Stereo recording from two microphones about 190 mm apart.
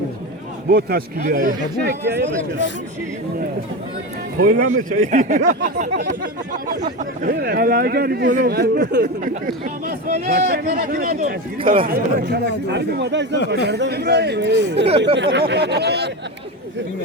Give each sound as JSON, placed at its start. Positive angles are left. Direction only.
{"t": 0.7, "sound": "speech", "side_deg": -55}
{"t": 4.4, "sound": "speech", "side_deg": -50}
{"t": 11.6, "sound": "a man's voice", "side_deg": -30}
{"t": 11.9, "sound": "speech", "side_deg": -55}